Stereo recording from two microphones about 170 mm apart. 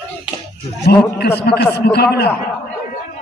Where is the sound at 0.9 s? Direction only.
65° left (ahead or behind).